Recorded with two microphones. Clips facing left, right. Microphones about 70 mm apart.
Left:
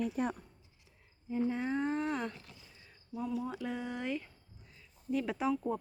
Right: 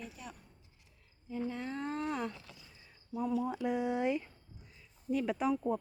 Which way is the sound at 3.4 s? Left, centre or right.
Centre.